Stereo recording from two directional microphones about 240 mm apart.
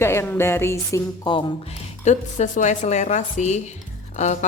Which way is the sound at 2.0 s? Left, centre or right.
Left.